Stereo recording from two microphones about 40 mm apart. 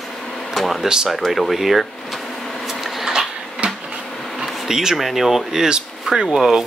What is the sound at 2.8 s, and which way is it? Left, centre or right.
Printer, centre.